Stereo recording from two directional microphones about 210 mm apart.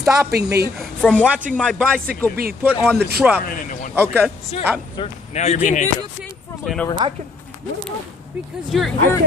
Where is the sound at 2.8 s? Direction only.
10° right (ahead or behind).